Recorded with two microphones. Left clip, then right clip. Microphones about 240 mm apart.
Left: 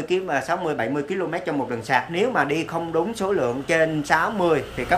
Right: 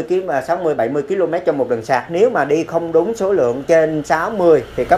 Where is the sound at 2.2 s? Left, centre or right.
Centre.